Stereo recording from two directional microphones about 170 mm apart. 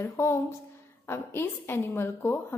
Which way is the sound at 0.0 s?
15° left (ahead or behind).